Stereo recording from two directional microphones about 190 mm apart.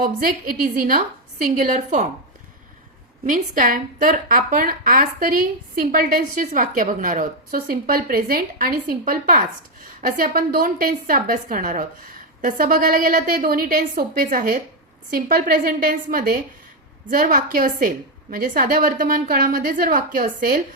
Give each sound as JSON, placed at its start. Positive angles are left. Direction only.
{"t": 0.0, "sound": "a woman's voice", "side_deg": -50}
{"t": 3.2, "sound": "a woman's voice", "side_deg": -45}